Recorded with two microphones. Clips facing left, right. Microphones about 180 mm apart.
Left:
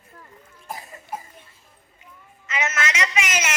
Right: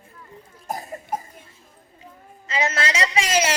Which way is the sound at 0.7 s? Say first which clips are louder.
Right 5 dB; 45° right (ahead or behind).